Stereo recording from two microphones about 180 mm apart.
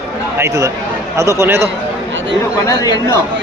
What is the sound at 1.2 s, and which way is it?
Speech, 15° right (ahead or behind).